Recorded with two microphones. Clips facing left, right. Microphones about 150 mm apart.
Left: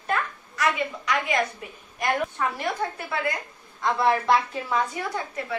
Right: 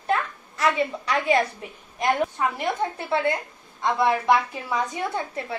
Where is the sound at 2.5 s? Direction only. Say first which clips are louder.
Right 2 dB; 25° right (ahead or behind).